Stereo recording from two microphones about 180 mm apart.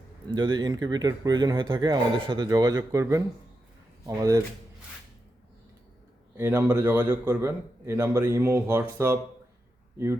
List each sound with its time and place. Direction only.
0.3 s a man's voice: 25° right (ahead or behind)
6.3 s a man's voice: 10° right (ahead or behind)